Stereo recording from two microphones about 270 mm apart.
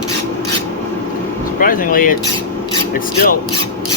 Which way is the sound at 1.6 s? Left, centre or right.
Left.